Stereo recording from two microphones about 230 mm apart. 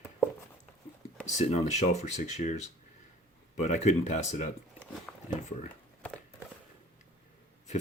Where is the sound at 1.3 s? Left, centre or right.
Left.